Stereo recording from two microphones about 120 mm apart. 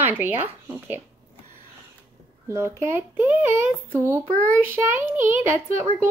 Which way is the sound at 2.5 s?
25° right (ahead or behind).